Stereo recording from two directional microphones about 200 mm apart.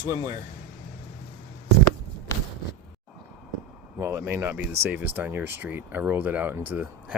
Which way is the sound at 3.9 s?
15° right (ahead or behind).